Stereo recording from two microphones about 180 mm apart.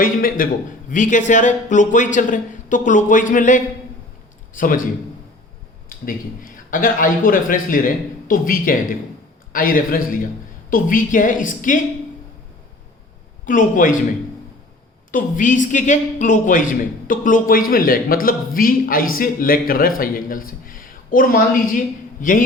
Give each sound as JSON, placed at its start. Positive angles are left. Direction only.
{"t": 0.0, "sound": "a man's voice", "side_deg": 50}
{"t": 5.9, "sound": "a man's voice", "side_deg": 50}
{"t": 13.4, "sound": "a man's voice", "side_deg": 45}
{"t": 15.1, "sound": "a man's voice", "side_deg": 45}